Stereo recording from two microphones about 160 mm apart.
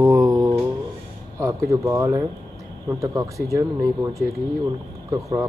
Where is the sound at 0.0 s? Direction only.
20° right (ahead or behind).